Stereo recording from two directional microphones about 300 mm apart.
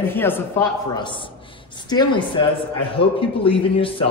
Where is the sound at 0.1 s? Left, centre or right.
Centre.